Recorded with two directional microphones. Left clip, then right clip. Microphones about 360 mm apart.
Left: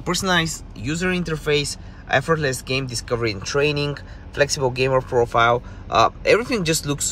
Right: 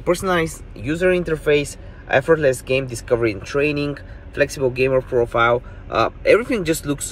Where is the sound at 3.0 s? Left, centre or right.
Centre.